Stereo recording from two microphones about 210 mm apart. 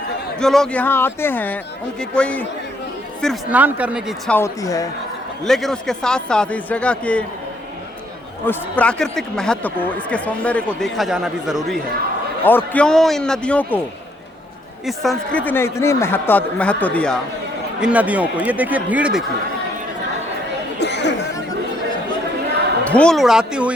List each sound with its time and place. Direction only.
0.3 s speech: centre (ahead or behind)
3.5 s a man's voice: 5° right (ahead or behind)
4.3 s speech: 10° left (ahead or behind)
5.5 s speech: centre (ahead or behind)
8.4 s speech: 5° left (ahead or behind)
12.5 s speech: 10° left (ahead or behind)
14.8 s speech: centre (ahead or behind)
17.7 s a man's voice: 5° right (ahead or behind)
20.7 s chatter: 55° left (ahead or behind)
22.8 s speech: 5° left (ahead or behind)